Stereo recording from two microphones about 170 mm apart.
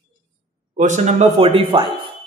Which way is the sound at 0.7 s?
45° right (ahead or behind).